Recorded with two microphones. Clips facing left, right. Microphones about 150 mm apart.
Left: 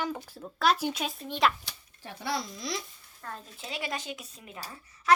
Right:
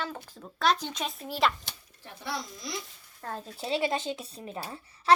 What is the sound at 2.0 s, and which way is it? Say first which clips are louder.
Speech: left 3 dB; 90° left.